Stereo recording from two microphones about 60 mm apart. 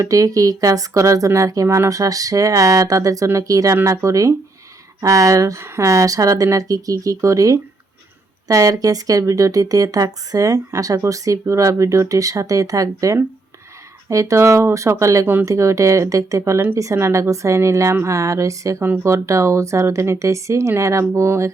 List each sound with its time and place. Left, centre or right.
0.0 s speech: right
1.6 s music: right
1.9 s speech: right
5.5 s speech: right
16.4 s speech: right
16.7 s speech: right
18.8 s speech: right
21.2 s music: right